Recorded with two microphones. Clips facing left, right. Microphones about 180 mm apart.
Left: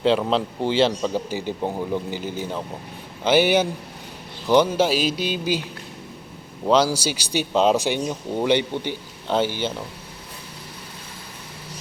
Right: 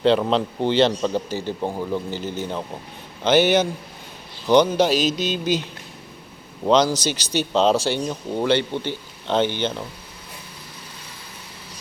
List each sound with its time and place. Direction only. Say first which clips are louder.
0.0 s speech: right 2 dB; 5° left (ahead or behind)
6.7 s speech: right 1 dB; 5° left (ahead or behind)